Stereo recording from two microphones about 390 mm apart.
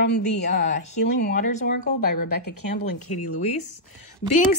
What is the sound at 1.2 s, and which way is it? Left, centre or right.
A woman's voice, left.